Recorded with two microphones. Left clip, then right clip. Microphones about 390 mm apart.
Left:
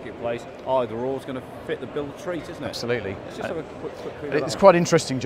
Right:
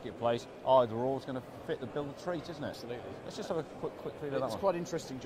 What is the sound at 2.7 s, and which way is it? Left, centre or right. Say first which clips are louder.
Speech: left 16 dB; left.